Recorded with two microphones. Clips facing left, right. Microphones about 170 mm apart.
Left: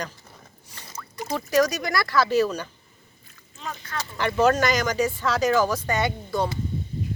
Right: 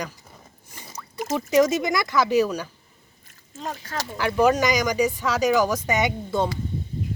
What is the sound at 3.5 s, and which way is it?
Speech, 40° right (ahead or behind).